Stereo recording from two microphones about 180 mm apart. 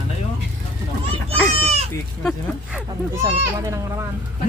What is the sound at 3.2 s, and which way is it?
Speech, 15° right (ahead or behind).